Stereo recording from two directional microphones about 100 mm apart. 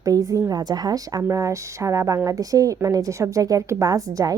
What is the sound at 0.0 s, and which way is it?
A woman's voice, 35° right (ahead or behind).